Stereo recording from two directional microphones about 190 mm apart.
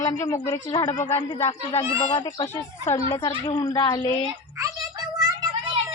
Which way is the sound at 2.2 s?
25° left (ahead or behind).